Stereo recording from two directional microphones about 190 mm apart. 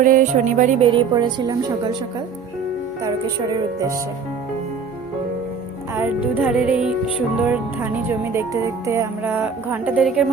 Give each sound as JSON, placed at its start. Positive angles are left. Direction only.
{"t": 0.0, "sound": "music", "side_deg": -45}
{"t": 0.9, "sound": "a woman's voice", "side_deg": -25}
{"t": 5.9, "sound": "speech", "side_deg": -10}
{"t": 6.4, "sound": "music", "side_deg": -5}
{"t": 7.4, "sound": "speech", "side_deg": -10}